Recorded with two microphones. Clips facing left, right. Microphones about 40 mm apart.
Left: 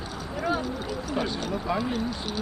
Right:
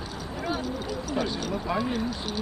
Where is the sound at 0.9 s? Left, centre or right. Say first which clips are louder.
Right 1 dB; centre.